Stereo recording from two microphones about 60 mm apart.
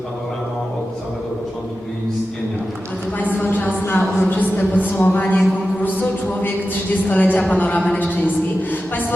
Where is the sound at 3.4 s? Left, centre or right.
Left.